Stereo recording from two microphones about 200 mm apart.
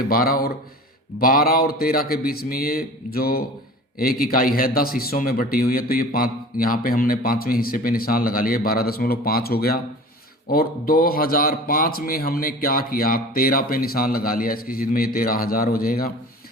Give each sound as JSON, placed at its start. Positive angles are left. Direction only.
{"t": 0.1, "sound": "a man's voice", "side_deg": 50}